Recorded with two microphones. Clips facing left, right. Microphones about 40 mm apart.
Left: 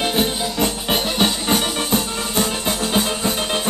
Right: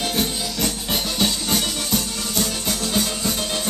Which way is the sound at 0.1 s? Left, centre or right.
Left.